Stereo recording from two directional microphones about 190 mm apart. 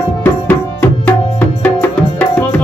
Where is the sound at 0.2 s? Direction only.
10° left (ahead or behind).